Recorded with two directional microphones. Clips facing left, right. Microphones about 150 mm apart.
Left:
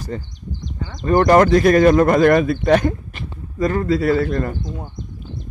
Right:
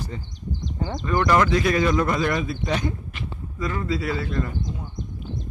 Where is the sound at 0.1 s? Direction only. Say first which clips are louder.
Left 3 dB; 50° left (ahead or behind).